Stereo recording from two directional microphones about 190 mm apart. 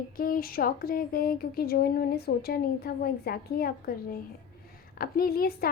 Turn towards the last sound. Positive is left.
turn(degrees=50)  # may be behind; listen again after turning